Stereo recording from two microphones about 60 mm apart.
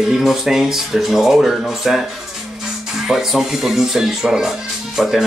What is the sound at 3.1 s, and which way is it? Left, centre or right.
Speech, centre.